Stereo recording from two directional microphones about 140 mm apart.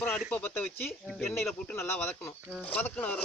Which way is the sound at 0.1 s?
15° left (ahead or behind).